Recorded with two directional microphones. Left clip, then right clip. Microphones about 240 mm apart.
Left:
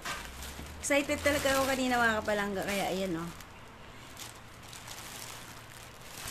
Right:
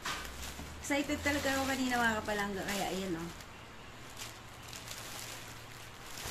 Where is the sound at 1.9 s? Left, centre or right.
Left.